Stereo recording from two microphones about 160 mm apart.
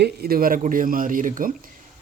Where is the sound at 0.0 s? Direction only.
75° right (ahead or behind).